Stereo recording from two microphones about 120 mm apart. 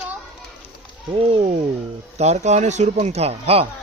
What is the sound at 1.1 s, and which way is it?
Speech, 50° right (ahead or behind).